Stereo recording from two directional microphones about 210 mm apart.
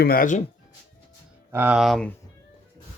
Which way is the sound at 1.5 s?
10° right (ahead or behind).